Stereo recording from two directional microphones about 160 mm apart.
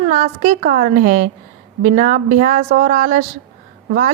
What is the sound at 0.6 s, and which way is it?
A woman's voice, 60° right (ahead or behind).